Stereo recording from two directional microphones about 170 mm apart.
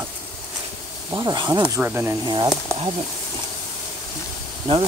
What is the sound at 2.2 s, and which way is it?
Speech, 25° right (ahead or behind).